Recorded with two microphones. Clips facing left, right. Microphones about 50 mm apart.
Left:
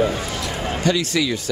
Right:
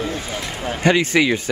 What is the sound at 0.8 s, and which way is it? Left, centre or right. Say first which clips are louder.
Speech: right 5 dB; right.